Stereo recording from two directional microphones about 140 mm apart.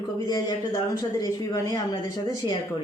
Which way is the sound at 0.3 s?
25° left (ahead or behind).